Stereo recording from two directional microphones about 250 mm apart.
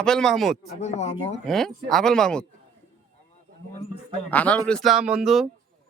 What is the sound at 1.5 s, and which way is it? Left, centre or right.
Speech, centre.